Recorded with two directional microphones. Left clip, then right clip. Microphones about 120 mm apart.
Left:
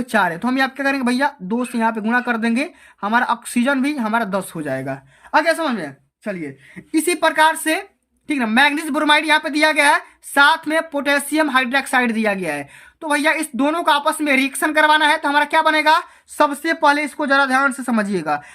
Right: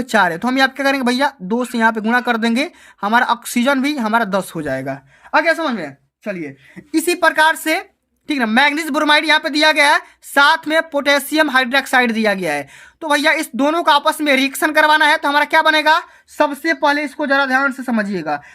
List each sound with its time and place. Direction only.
0.0 s a woman's voice: 45° right (ahead or behind)
16.4 s speech: 5° right (ahead or behind)